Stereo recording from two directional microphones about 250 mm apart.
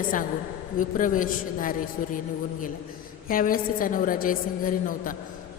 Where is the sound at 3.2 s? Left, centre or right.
Left.